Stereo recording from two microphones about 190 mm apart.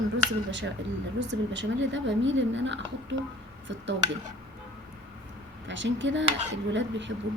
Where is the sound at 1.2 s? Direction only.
70° right (ahead or behind).